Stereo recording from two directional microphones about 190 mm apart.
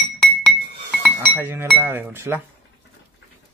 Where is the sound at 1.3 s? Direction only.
10° right (ahead or behind).